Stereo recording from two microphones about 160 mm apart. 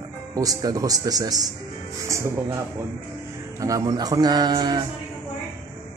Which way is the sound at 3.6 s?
20° right (ahead or behind).